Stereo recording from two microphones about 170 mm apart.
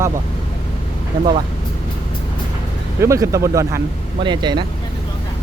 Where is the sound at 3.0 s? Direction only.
15° right (ahead or behind).